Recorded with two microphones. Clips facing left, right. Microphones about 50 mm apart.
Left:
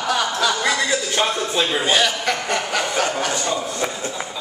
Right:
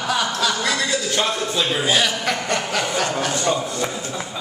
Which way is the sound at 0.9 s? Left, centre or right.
Centre.